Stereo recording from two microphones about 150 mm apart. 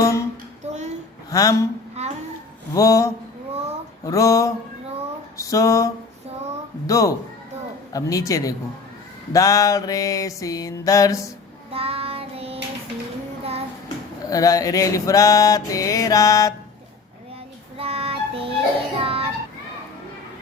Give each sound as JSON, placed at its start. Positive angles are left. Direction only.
{"t": 0.6, "sound": "a sound", "side_deg": -50}
{"t": 1.3, "sound": "music", "side_deg": 25}
{"t": 2.0, "sound": "a sound", "side_deg": -45}
{"t": 2.7, "sound": "music", "side_deg": 20}
{"t": 11.7, "sound": "child singing", "side_deg": -40}
{"t": 14.3, "sound": "music", "side_deg": 25}
{"t": 17.7, "sound": "music", "side_deg": -40}